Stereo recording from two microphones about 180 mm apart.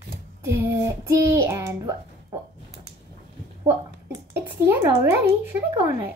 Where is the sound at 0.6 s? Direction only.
15° right (ahead or behind).